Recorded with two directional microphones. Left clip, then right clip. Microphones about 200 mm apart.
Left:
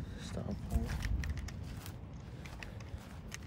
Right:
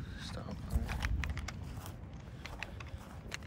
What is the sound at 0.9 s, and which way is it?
Clip-clop, 30° right (ahead or behind).